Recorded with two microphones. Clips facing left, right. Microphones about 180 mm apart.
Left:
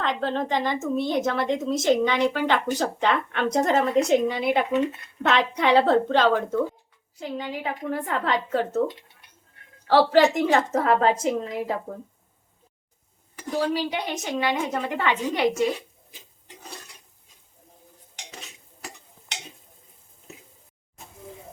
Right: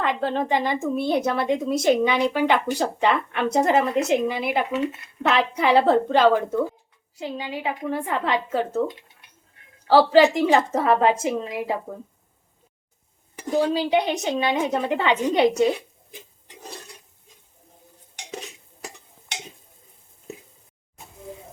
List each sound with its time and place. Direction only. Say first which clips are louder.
0.0 s speech: right 2 dB; 10° right (ahead or behind)
10.2 s speech: right 2 dB; 10° right (ahead or behind)
13.5 s a woman's voice: right 5 dB; 15° right (ahead or behind)